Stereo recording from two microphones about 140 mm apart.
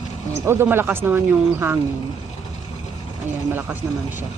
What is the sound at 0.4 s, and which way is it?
Speech, 15° right (ahead or behind).